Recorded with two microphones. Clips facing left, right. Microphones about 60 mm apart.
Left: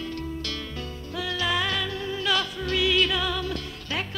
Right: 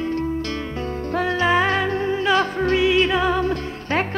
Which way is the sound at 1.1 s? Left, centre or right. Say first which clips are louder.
Right 8 dB; right.